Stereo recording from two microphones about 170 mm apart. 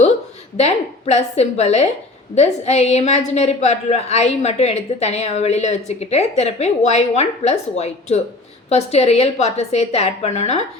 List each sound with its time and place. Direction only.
0.5 s a woman's voice: 40° left (ahead or behind)